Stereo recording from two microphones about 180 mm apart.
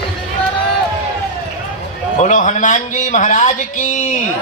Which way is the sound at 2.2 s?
40° left (ahead or behind).